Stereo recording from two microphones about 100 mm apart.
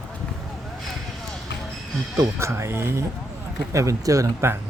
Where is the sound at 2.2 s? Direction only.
25° right (ahead or behind).